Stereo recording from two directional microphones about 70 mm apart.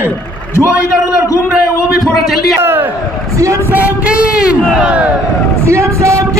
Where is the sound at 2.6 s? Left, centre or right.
Right.